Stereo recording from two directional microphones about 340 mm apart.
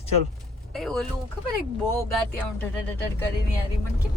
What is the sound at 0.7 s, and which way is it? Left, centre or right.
Speech, centre.